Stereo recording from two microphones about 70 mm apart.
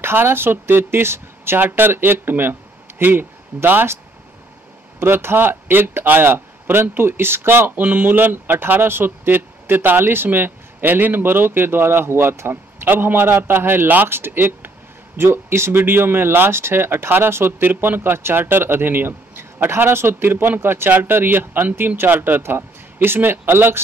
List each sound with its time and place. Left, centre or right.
0.0 s a man's voice: right
5.0 s a man's voice: right